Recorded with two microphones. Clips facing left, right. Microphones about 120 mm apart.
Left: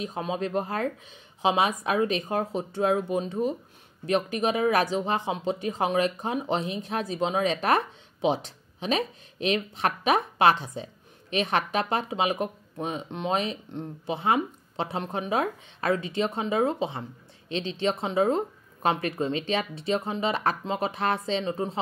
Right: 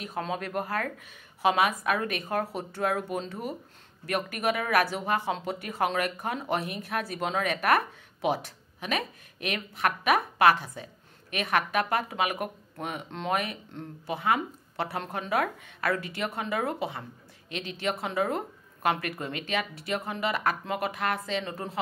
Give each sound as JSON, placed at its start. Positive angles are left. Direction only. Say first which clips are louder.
{"t": 0.0, "sound": "speech", "louder": "left 3 dB", "side_deg": 20}